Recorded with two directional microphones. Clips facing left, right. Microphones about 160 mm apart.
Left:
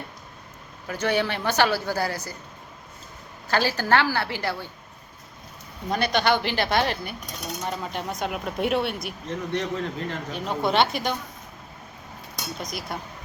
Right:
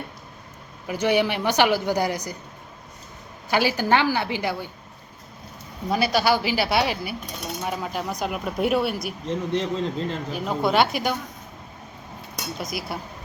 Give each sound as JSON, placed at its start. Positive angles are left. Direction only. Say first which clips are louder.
{"t": 0.9, "sound": "speech", "louder": "right 3 dB", "side_deg": -15}
{"t": 3.5, "sound": "speech", "louder": "right 1 dB", "side_deg": -15}
{"t": 5.9, "sound": "speech", "louder": "right 2 dB", "side_deg": -5}
{"t": 9.2, "sound": "a man's voice", "louder": "right 3 dB", "side_deg": -30}
{"t": 10.3, "sound": "speech", "louder": "right 1 dB", "side_deg": 0}
{"t": 12.5, "sound": "speech", "louder": "right 3 dB", "side_deg": -5}